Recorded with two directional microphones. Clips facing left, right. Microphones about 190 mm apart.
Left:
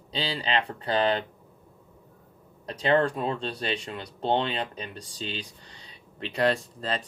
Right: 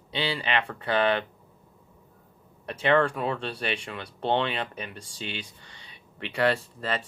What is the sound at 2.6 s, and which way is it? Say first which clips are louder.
Speech: even; 35° left (ahead or behind).